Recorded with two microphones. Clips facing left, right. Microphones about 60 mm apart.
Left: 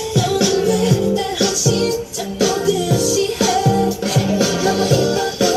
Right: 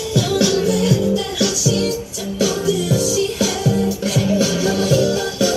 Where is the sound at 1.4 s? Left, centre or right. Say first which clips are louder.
Left 1 dB; left.